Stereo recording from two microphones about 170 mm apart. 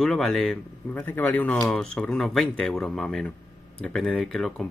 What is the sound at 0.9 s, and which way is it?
A man's voice, 10° left (ahead or behind).